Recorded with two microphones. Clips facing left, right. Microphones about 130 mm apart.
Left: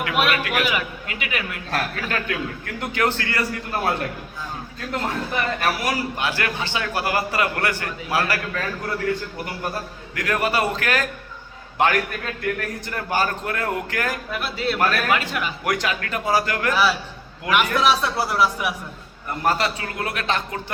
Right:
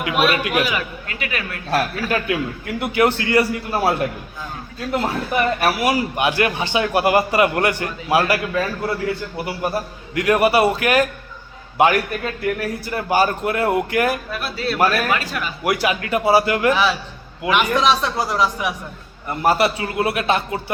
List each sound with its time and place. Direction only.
0.0 s a man's voice: 20° right (ahead or behind)
0.7 s speech: 15° left (ahead or behind)
1.7 s a man's voice: 10° right (ahead or behind)
14.3 s a man's voice: 20° left (ahead or behind)
14.8 s a man's voice: 10° right (ahead or behind)
15.1 s a man's voice: 20° left (ahead or behind)
15.6 s a man's voice: 10° right (ahead or behind)
17.5 s speech: 10° left (ahead or behind)
19.4 s a man's voice: 10° right (ahead or behind)